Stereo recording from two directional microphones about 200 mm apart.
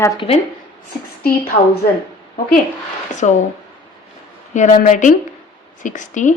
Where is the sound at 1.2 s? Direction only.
50° left (ahead or behind).